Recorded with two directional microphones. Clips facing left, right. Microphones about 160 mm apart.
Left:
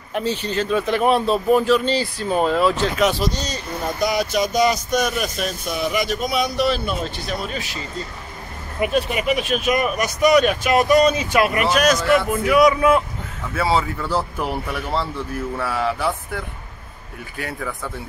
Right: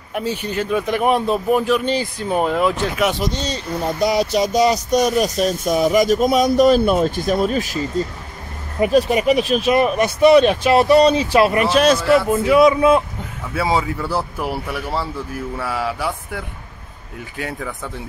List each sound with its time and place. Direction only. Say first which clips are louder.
0.1 s a man's voice: even; 10° right (ahead or behind)
13.6 s speech: right 1 dB; 15° right (ahead or behind)